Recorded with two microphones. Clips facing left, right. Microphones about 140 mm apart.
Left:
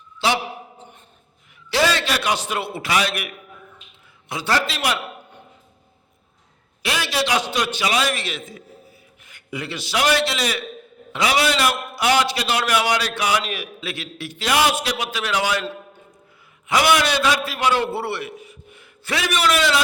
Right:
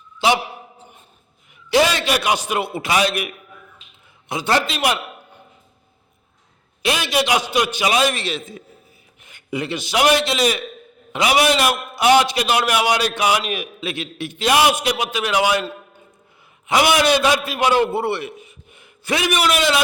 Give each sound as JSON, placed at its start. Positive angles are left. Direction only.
{"t": 0.2, "sound": "a man's voice", "side_deg": -15}
{"t": 1.7, "sound": "a man's voice", "side_deg": -20}
{"t": 6.8, "sound": "a man's voice", "side_deg": -20}
{"t": 16.6, "sound": "a man's voice", "side_deg": -20}